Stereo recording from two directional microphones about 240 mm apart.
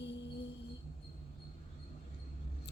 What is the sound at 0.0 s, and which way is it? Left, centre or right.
Music, left.